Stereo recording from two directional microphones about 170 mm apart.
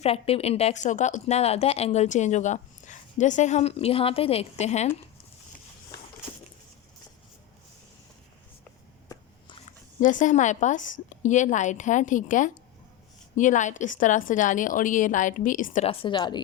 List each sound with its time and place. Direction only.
0.0 s speech: 35° left (ahead or behind)
10.0 s a woman's voice: 50° left (ahead or behind); by 16.4 s 25° left (ahead or behind)